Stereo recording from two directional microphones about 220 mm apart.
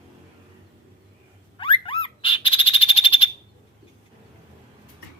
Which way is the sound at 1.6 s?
25° left (ahead or behind).